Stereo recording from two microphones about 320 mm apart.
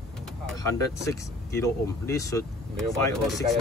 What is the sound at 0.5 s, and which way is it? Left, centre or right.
Speech, centre.